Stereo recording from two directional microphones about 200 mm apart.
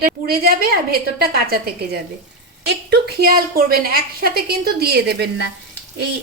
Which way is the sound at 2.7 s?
55° right (ahead or behind).